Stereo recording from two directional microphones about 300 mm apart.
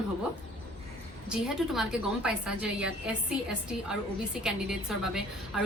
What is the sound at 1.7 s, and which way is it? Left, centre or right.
A woman's voice, centre.